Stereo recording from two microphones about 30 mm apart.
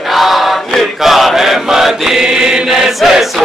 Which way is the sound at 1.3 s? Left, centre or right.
Centre.